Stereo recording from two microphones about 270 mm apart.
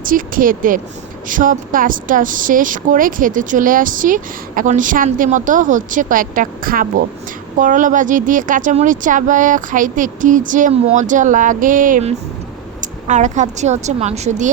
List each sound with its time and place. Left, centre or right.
0.0 s a woman's voice: right